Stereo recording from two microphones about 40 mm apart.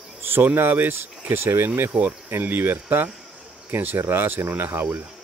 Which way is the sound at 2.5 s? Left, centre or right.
Right.